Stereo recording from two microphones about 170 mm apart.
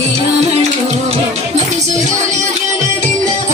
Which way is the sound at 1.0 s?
40° right (ahead or behind).